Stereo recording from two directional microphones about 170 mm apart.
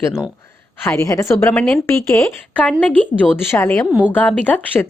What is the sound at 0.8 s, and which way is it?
Speech, 20° left (ahead or behind).